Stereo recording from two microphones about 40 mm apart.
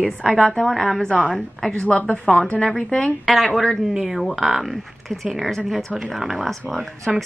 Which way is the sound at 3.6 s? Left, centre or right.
Centre.